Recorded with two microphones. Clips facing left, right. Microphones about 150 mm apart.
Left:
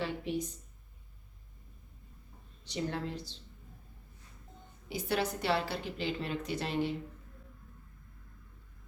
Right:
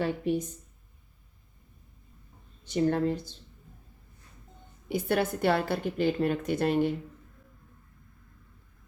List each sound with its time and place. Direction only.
0.0 s a woman's voice: 50° right (ahead or behind)
2.6 s a woman's voice: 50° right (ahead or behind)
4.9 s a woman's voice: 55° right (ahead or behind)